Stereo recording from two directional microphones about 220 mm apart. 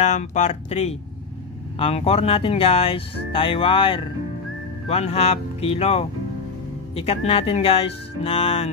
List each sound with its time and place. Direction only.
0.0 s speech: 30° left (ahead or behind)